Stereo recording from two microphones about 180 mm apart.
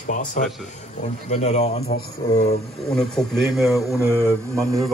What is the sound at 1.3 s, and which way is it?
Speech, 40° left (ahead or behind).